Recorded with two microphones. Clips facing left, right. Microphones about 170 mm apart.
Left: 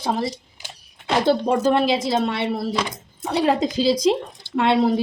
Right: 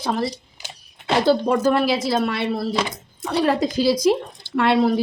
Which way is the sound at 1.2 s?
20° left (ahead or behind).